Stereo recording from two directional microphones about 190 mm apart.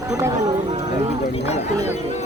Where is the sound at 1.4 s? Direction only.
35° left (ahead or behind).